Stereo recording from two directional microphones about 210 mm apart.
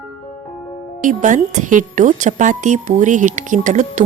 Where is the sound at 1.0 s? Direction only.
35° right (ahead or behind).